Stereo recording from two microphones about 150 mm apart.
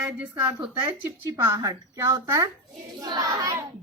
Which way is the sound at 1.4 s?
20° right (ahead or behind).